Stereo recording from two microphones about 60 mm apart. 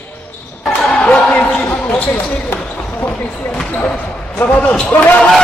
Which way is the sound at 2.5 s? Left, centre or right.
Left.